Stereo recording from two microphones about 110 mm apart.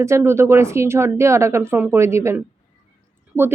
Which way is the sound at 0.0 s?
25° right (ahead or behind).